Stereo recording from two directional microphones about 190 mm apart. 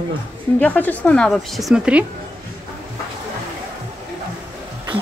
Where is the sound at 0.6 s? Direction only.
10° left (ahead or behind).